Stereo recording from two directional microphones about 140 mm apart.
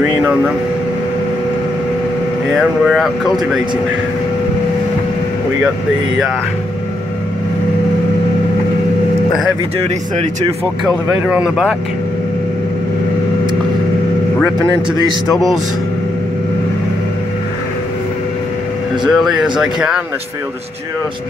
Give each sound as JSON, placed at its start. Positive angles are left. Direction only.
{"t": 2.5, "sound": "speech", "side_deg": 0}
{"t": 10.9, "sound": "speech", "side_deg": -5}
{"t": 14.9, "sound": "a man's voice", "side_deg": -30}
{"t": 19.0, "sound": "speech", "side_deg": 0}